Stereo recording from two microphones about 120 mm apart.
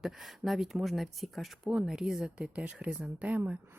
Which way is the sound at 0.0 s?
Centre (ahead or behind).